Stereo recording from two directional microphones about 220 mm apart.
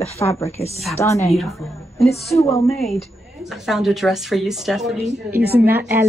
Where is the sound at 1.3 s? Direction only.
Centre (ahead or behind).